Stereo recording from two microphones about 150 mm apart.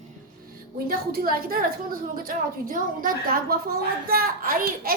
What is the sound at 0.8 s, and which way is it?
A woman's voice, 80° right.